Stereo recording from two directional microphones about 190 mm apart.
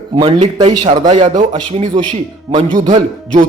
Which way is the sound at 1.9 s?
25° right (ahead or behind).